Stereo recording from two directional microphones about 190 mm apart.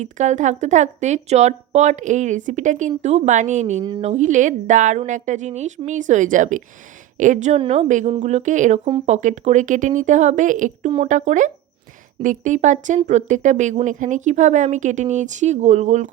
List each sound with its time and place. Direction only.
0.0 s speech: 40° right (ahead or behind)